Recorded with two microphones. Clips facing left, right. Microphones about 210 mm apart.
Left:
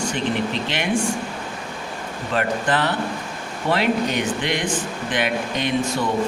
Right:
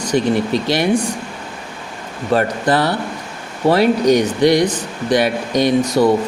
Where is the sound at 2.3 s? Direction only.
40° right (ahead or behind).